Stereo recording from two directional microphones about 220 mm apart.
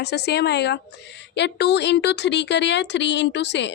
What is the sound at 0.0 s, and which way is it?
A woman's voice, 50° left (ahead or behind).